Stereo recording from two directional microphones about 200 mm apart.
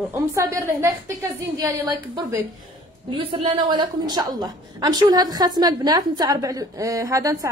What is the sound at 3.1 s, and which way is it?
A woman's voice, 25° right (ahead or behind).